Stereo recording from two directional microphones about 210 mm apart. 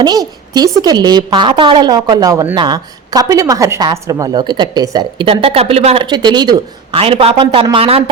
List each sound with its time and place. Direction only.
0.0 s a woman's voice: 20° right (ahead or behind)